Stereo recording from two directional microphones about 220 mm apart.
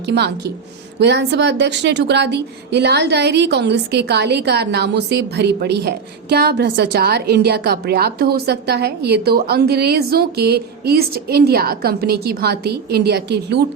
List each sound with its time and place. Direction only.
0.0 s a woman's voice: 50° right (ahead or behind)